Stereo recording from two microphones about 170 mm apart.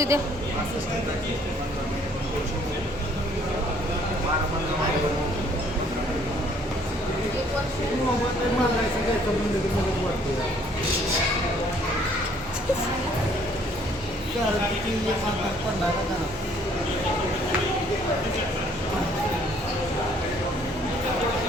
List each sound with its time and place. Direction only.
0.1 s a woman's voice: 15° right (ahead or behind)